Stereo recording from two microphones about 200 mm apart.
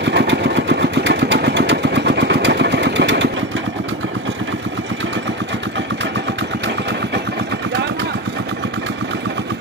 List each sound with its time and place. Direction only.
0.0 s vehicle: 60° right (ahead or behind)